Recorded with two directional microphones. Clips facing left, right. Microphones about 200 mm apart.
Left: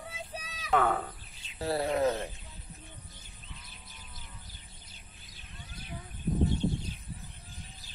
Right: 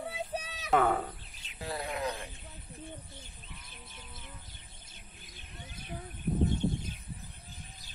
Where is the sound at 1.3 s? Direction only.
40° left (ahead or behind).